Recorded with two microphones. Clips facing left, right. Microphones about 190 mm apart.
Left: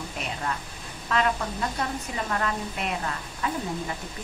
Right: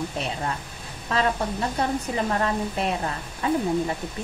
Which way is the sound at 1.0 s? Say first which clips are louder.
Right 2 dB; 30° right (ahead or behind).